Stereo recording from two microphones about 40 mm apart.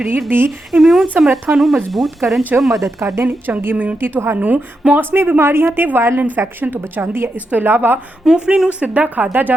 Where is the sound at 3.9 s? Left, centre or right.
Right.